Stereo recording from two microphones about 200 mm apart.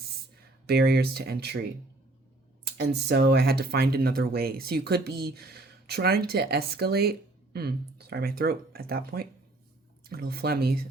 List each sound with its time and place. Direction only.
0.7 s speech: 50° right (ahead or behind)
2.7 s speech: 55° right (ahead or behind)